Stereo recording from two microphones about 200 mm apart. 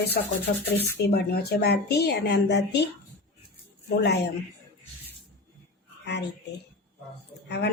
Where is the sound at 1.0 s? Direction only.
55° left (ahead or behind).